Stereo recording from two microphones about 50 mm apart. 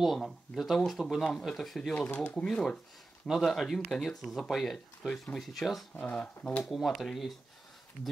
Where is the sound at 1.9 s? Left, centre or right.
Left.